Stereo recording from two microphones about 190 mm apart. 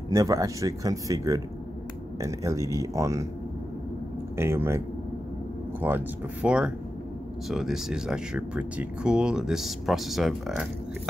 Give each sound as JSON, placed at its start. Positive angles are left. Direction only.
{"t": 0.1, "sound": "speech", "side_deg": -20}
{"t": 4.4, "sound": "speech", "side_deg": -15}